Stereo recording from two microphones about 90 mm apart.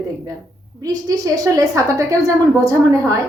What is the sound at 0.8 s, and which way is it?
A woman's voice, 40° right (ahead or behind).